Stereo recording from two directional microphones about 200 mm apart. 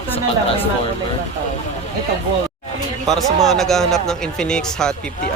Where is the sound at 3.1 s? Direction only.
Centre (ahead or behind).